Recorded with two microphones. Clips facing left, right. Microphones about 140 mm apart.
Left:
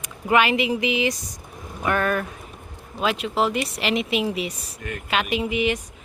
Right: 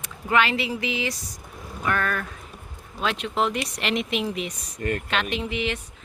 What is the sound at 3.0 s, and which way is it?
Speech, 5° left (ahead or behind).